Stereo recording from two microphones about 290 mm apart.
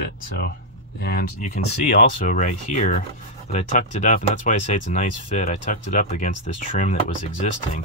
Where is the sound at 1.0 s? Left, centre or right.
Left.